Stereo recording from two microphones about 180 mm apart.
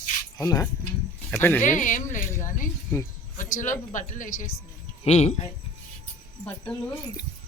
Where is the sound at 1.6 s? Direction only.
45° left (ahead or behind).